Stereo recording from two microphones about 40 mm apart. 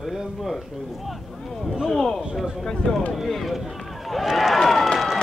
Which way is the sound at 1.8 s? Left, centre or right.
Centre.